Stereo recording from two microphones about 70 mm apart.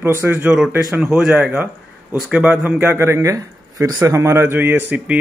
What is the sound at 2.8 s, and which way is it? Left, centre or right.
Speech, right.